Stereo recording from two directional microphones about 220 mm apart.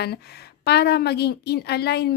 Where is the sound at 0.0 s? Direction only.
45° left (ahead or behind).